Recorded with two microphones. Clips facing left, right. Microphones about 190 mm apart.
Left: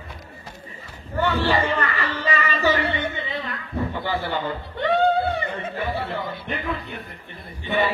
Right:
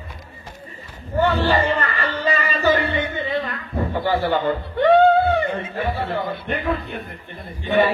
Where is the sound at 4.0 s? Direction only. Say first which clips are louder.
Right 6 dB; 50° right (ahead or behind).